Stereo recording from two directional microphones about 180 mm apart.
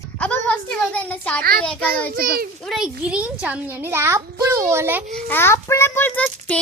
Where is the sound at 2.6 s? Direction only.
Centre (ahead or behind).